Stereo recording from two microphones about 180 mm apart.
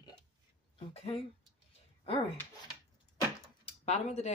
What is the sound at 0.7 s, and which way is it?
Speech, 30° left (ahead or behind).